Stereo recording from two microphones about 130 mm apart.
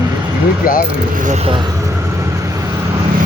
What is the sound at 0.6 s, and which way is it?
Speech, 90° left.